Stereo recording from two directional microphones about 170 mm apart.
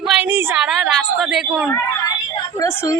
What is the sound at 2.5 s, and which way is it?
Speech, 15° left (ahead or behind).